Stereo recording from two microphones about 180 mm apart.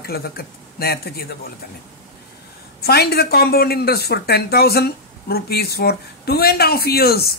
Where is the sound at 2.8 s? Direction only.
60° left (ahead or behind).